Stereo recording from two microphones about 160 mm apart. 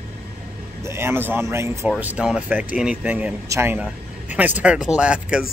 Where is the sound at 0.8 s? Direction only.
15° right (ahead or behind).